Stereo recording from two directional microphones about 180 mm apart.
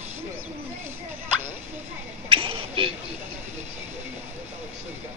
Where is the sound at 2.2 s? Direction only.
30° right (ahead or behind).